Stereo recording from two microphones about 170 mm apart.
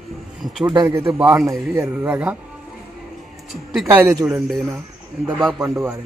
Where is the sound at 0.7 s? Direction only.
20° right (ahead or behind).